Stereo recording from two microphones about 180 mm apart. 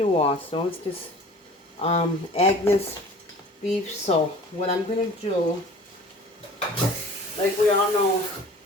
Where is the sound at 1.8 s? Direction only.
35° left (ahead or behind).